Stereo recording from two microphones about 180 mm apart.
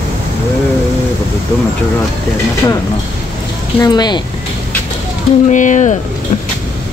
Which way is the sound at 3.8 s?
25° left (ahead or behind).